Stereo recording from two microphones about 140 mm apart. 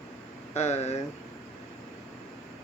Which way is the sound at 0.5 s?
50° left (ahead or behind).